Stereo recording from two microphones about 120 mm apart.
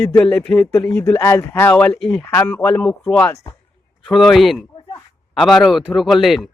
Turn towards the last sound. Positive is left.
turn(degrees=0)  # may be behind; listen again after turning